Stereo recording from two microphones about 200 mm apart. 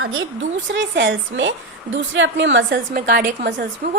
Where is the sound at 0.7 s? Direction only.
65° right (ahead or behind).